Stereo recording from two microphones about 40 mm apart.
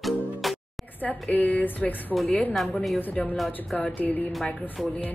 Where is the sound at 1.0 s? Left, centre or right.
Left.